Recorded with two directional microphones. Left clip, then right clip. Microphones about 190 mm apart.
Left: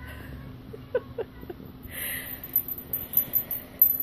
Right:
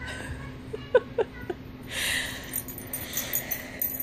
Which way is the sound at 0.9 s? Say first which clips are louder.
Right 7 dB; 15° right (ahead or behind).